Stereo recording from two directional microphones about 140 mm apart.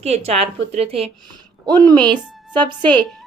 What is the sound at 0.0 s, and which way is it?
A woman's voice, 50° right (ahead or behind).